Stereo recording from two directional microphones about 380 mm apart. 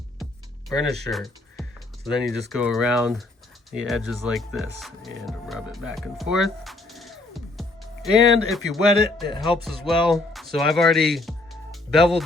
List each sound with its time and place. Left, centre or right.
0.7 s speech: centre